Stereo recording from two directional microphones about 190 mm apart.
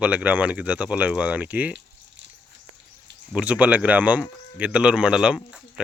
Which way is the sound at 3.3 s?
10° right (ahead or behind).